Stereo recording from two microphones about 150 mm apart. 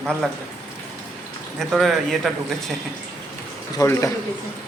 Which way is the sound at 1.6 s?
Centre (ahead or behind).